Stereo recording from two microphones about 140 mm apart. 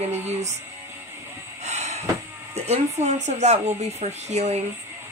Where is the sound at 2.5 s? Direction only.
50° right (ahead or behind).